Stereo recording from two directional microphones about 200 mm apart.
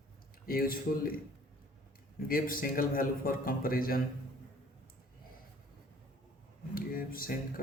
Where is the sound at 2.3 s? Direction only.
45° left (ahead or behind).